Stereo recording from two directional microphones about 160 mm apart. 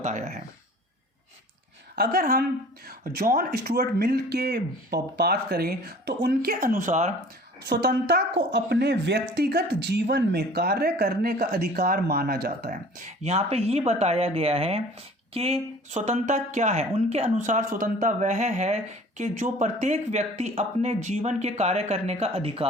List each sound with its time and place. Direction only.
0.0 s speech: 50° right (ahead or behind)
2.0 s a woman's voice: 65° right (ahead or behind); by 7.1 s 50° right (ahead or behind)
7.7 s a woman's voice: 85° right; by 13.1 s 55° right (ahead or behind)
13.2 s speech: 40° right (ahead or behind)